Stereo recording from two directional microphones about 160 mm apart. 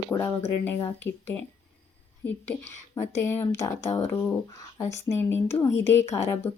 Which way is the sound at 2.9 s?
15° left (ahead or behind).